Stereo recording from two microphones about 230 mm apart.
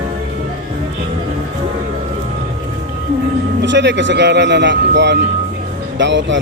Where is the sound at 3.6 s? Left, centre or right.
Right.